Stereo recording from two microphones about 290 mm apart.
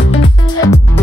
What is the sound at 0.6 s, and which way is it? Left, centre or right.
Music, centre.